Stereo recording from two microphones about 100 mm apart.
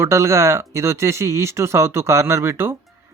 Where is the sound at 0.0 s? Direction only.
30° right (ahead or behind).